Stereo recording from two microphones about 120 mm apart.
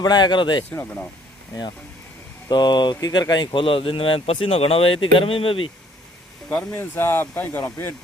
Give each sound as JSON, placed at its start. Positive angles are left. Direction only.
{"t": 0.0, "sound": "speech", "side_deg": 40}
{"t": 0.7, "sound": "speech", "side_deg": 10}
{"t": 2.5, "sound": "speech", "side_deg": 35}
{"t": 6.5, "sound": "speech", "side_deg": 15}